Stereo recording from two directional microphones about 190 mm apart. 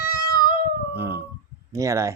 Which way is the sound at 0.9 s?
10° right (ahead or behind).